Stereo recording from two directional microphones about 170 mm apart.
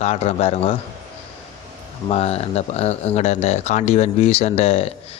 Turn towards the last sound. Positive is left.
turn(degrees=35)  # may be behind; listen again after turning